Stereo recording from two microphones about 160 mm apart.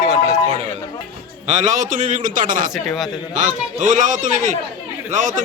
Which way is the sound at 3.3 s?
50° right (ahead or behind).